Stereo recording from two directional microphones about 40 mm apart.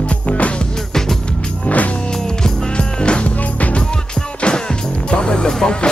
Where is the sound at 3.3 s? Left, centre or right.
Left.